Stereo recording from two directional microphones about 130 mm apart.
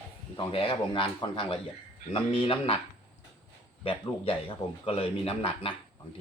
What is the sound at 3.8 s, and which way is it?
Speech, 45° left (ahead or behind).